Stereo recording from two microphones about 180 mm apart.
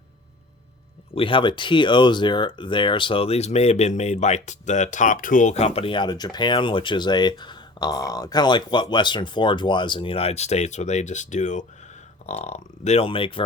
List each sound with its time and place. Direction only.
1.1 s speech: 30° left (ahead or behind)